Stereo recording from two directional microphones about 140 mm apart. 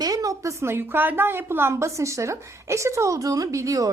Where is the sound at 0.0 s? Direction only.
25° right (ahead or behind).